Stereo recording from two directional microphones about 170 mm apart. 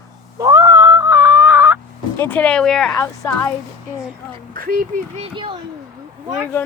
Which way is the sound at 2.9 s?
20° left (ahead or behind).